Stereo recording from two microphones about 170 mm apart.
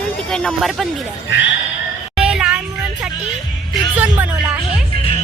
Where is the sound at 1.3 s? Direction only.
90° left.